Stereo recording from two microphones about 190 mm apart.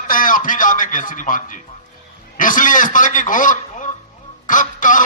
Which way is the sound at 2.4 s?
45° left (ahead or behind).